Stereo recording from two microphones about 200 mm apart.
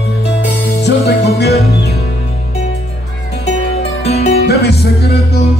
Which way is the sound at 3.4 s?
30° left (ahead or behind).